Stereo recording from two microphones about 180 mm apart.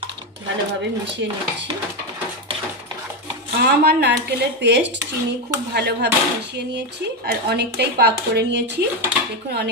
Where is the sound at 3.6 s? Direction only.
60° right (ahead or behind).